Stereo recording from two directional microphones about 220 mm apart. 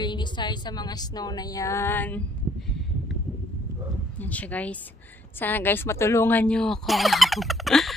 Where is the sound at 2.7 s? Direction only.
Centre (ahead or behind).